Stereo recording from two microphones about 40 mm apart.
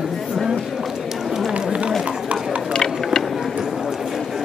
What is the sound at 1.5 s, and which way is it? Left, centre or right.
Run, right.